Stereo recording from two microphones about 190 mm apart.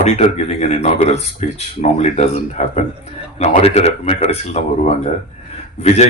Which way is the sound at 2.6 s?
35° left (ahead or behind).